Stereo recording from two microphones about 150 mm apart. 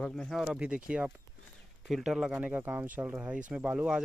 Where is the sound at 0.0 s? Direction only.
5° left (ahead or behind).